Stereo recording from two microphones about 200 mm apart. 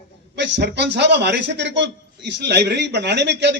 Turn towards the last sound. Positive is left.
turn(degrees=-60)  # may be behind; listen again after turning